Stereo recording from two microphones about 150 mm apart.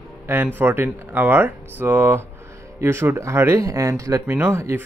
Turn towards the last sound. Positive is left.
turn(degrees=-15)  # may be behind; listen again after turning